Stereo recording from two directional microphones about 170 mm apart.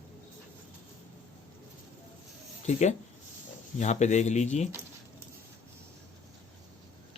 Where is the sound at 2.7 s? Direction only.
45° left (ahead or behind).